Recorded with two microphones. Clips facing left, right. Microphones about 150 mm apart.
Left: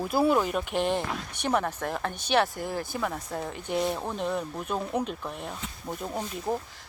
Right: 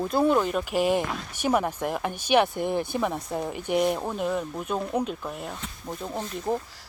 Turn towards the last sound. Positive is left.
turn(degrees=5)  # may be behind; listen again after turning